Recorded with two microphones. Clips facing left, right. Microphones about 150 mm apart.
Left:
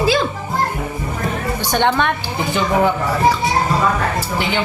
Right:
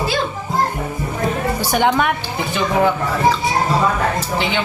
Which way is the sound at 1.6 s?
10° right (ahead or behind).